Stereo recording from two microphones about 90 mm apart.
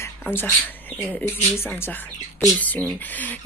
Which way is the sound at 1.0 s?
20° left (ahead or behind).